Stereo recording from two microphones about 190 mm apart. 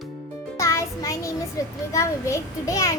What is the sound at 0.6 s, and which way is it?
Music, 15° left (ahead or behind).